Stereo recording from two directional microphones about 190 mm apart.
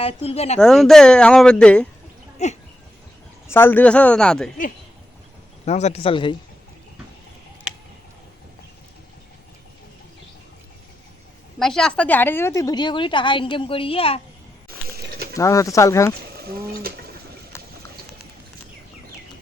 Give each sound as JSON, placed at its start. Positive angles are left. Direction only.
{"t": 0.0, "sound": "speech", "side_deg": 30}
{"t": 0.6, "sound": "speech", "side_deg": 0}
{"t": 2.4, "sound": "speech", "side_deg": 35}
{"t": 3.5, "sound": "speech", "side_deg": 10}
{"t": 5.6, "sound": "speech", "side_deg": 35}
{"t": 11.6, "sound": "a woman's voice", "side_deg": 5}
{"t": 14.8, "sound": "mechanisms", "side_deg": -55}
{"t": 15.4, "sound": "speech", "side_deg": 15}
{"t": 16.4, "sound": "speech", "side_deg": -55}